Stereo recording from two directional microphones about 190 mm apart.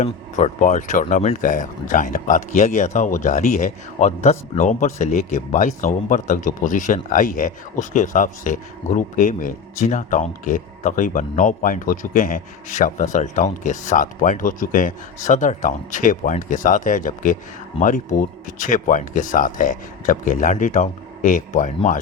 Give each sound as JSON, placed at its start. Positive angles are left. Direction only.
{"t": 0.0, "sound": "speech", "side_deg": 40}